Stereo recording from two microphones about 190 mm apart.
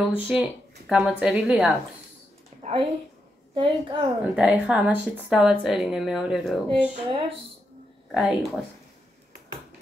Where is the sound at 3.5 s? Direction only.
25° right (ahead or behind).